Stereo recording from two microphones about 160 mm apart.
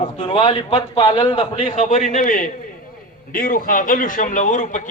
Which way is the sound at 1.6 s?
55° left (ahead or behind).